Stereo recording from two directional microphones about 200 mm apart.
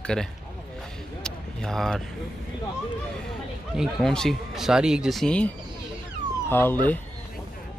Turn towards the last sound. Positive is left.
turn(degrees=10)  # may be behind; listen again after turning